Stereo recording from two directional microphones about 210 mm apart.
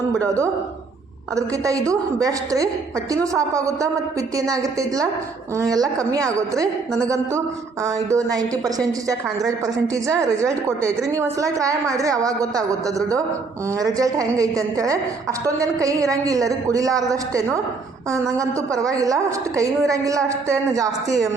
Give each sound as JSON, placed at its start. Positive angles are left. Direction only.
{"t": 1.4, "sound": "a woman's voice", "side_deg": -15}
{"t": 13.7, "sound": "a woman's voice", "side_deg": -15}